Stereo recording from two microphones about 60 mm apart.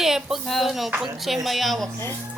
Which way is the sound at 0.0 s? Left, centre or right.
Centre.